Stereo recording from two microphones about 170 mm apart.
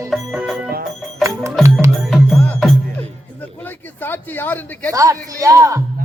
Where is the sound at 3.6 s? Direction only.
10° left (ahead or behind).